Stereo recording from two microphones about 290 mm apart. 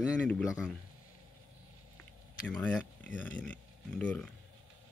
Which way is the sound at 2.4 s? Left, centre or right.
Centre.